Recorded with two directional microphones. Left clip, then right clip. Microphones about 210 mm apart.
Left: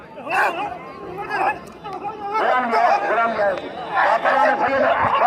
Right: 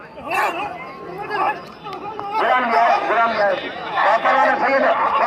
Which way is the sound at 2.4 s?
40° right (ahead or behind).